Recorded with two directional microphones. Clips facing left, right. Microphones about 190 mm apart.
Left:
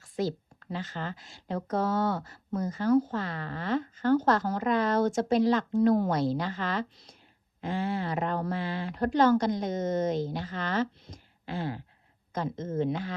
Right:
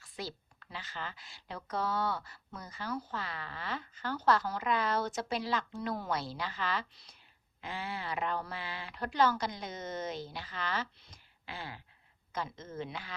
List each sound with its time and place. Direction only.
0.0 s speech: 45° left (ahead or behind)